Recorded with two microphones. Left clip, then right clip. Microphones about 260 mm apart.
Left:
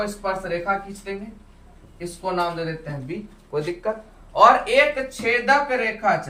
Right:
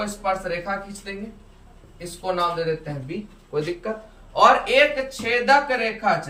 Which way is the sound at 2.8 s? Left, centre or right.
Centre.